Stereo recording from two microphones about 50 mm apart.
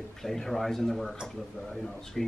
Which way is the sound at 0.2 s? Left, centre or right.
Centre.